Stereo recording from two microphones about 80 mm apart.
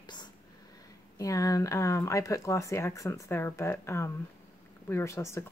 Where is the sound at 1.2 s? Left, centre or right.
Left.